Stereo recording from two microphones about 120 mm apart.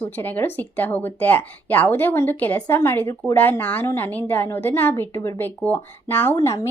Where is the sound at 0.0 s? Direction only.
15° left (ahead or behind).